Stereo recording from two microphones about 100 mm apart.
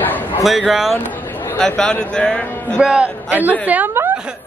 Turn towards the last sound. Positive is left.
turn(degrees=-20)  # may be behind; listen again after turning